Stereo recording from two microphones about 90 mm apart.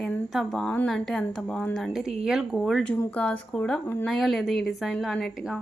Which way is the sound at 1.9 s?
5° right (ahead or behind).